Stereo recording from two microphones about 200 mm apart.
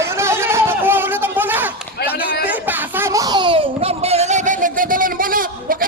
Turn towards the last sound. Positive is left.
turn(degrees=-45)  # may be behind; listen again after turning